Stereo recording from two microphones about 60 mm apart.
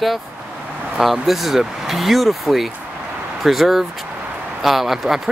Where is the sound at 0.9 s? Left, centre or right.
Centre.